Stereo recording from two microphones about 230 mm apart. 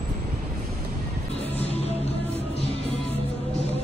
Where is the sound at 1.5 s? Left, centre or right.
Left.